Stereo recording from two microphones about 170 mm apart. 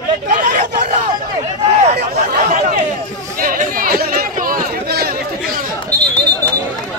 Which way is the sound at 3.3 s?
55° right (ahead or behind).